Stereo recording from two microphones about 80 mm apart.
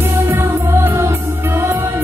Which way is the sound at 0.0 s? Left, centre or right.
Right.